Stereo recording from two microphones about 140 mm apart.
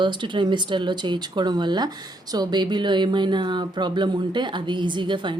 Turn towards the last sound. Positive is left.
turn(degrees=-35)  # may be behind; listen again after turning